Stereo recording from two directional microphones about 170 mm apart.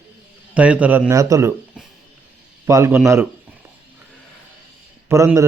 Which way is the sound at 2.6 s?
15° right (ahead or behind).